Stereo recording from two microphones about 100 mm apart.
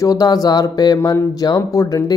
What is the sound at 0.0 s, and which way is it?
Speech, 40° left (ahead or behind).